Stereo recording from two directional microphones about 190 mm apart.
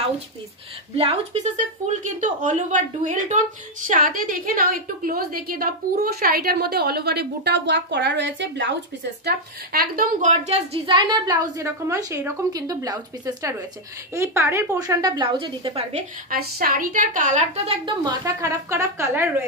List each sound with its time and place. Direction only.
0.9 s a woman's voice: 35° right (ahead or behind); by 8.7 s 75° right (ahead or behind)
9.2 s a woman's voice: 50° right (ahead or behind); by 16.0 s 30° right (ahead or behind)
16.3 s a woman's voice: 50° right (ahead or behind)
17.8 s a woman's voice: 20° right (ahead or behind)